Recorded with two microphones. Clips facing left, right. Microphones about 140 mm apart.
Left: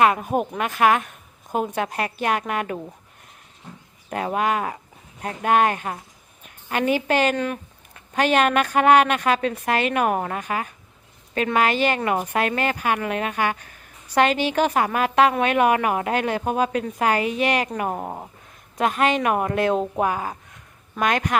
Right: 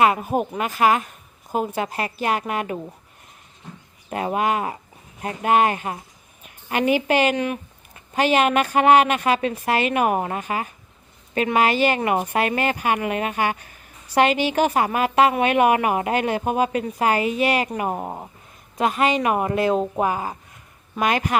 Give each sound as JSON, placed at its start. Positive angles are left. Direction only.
{"t": 0.0, "sound": "a woman's voice", "side_deg": -5}
{"t": 4.1, "sound": "a woman's voice", "side_deg": -5}